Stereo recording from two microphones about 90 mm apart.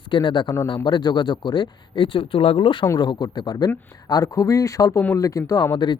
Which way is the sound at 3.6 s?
40° left (ahead or behind).